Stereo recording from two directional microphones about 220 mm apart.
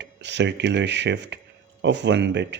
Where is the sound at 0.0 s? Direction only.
55° right (ahead or behind).